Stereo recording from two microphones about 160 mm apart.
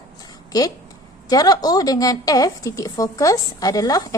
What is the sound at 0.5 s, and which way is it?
A woman's voice, 20° left (ahead or behind).